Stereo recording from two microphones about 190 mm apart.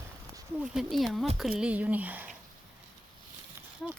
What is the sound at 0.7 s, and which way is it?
Speech, centre (ahead or behind).